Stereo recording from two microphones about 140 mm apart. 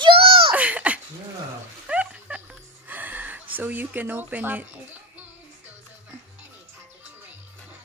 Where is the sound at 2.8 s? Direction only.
10° right (ahead or behind).